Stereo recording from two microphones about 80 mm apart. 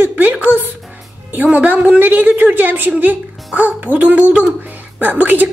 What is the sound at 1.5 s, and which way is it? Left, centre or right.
A woman's voice, centre.